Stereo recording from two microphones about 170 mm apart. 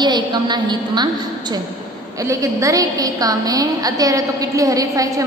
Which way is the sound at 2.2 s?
20° right (ahead or behind).